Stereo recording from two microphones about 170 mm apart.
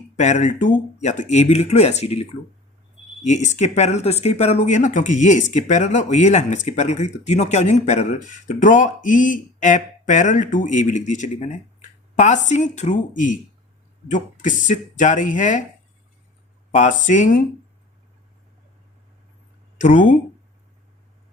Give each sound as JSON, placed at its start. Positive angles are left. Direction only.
{"t": 0.2, "sound": "speech", "side_deg": 45}
{"t": 3.2, "sound": "speech", "side_deg": 45}
{"t": 16.7, "sound": "speech", "side_deg": 45}
{"t": 19.8, "sound": "speech", "side_deg": 50}